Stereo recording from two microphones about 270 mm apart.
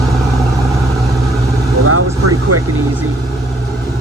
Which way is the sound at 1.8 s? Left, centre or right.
Right.